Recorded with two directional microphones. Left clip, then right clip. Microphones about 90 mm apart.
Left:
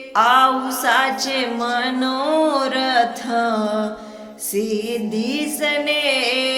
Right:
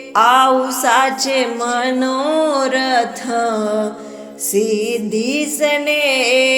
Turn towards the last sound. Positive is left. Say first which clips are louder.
# right 5 dB
turn(degrees=-45)  # may be behind; listen again after turning